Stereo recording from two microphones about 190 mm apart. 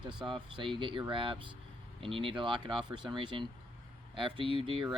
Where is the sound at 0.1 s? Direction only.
5° right (ahead or behind).